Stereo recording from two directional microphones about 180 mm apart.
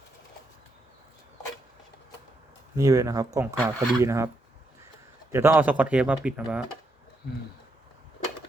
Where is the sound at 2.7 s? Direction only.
20° right (ahead or behind).